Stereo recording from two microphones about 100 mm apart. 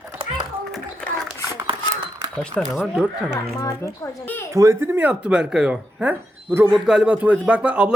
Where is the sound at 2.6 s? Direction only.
5° left (ahead or behind).